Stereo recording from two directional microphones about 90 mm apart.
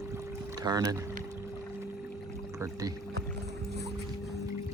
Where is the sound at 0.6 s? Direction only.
45° right (ahead or behind).